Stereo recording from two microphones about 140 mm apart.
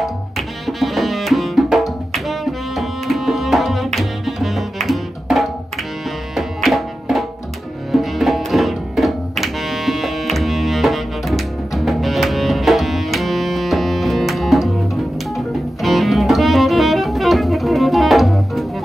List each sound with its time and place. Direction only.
0.7 s music: centre (ahead or behind)